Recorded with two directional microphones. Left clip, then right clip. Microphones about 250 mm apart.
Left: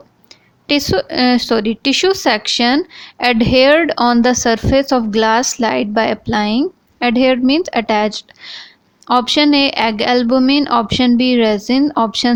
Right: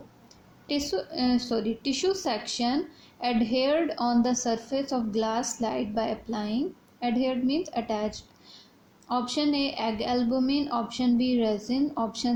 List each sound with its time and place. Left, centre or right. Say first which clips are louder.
0.7 s speech: left 14 dB; left